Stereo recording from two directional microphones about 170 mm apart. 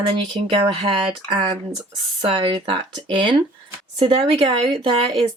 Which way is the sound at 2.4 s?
30° right (ahead or behind).